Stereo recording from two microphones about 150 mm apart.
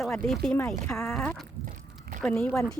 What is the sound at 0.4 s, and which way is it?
Speech, 15° left (ahead or behind).